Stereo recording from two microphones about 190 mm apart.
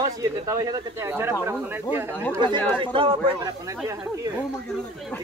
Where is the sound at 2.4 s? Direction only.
25° right (ahead or behind).